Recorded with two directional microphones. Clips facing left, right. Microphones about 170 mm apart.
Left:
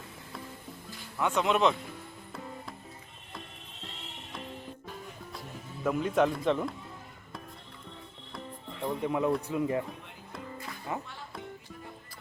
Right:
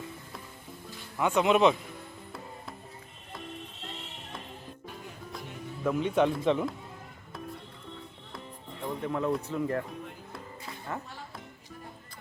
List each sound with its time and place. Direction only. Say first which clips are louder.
1.2 s speech: right 3 dB; 5° right (ahead or behind)
5.8 s speech: right 1 dB; centre (ahead or behind)
8.8 s speech: left 2 dB; 15° left (ahead or behind)